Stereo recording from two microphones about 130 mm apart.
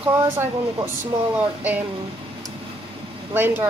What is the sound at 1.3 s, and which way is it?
Speech, 10° right (ahead or behind).